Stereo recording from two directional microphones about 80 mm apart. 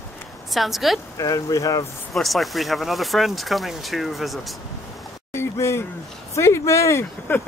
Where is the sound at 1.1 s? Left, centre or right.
Left.